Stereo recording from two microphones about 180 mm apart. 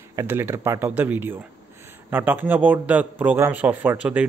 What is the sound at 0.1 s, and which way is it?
A man's voice, 15° right (ahead or behind).